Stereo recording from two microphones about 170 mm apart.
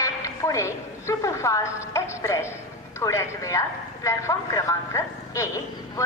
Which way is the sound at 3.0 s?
20° left (ahead or behind).